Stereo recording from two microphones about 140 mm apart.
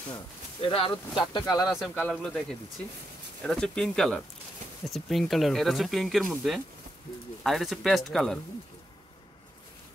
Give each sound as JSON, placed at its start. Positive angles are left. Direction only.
{"t": 0.6, "sound": "speech", "side_deg": 40}
{"t": 2.0, "sound": "speech", "side_deg": 10}
{"t": 3.4, "sound": "speech", "side_deg": 5}